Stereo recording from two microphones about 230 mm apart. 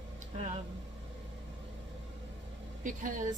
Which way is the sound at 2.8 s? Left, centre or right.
Right.